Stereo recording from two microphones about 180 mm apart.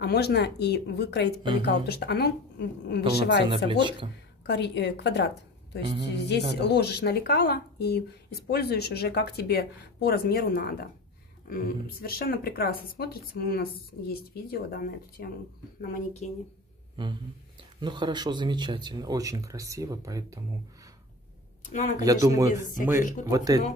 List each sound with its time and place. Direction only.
0.0 s speech: 65° left (ahead or behind)
3.3 s speech: 30° right (ahead or behind)
4.5 s a woman's voice: 70° left (ahead or behind); by 16.3 s 50° left (ahead or behind)
16.9 s speech: 25° right (ahead or behind)
21.6 s speech: 40° left (ahead or behind)
22.0 s speech: 20° right (ahead or behind)